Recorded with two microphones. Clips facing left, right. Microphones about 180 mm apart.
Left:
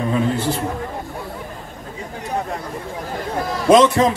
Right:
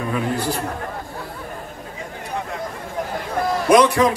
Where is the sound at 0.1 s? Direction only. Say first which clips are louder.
Left 2 dB; 25° left (ahead or behind).